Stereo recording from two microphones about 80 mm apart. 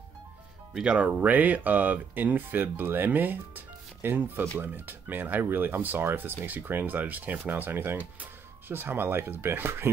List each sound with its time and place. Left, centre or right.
0.7 s speech: centre; by 9.8 s right